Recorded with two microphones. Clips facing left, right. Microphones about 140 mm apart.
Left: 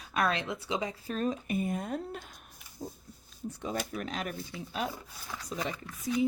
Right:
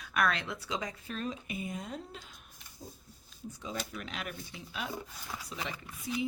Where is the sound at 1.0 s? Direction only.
45° left (ahead or behind).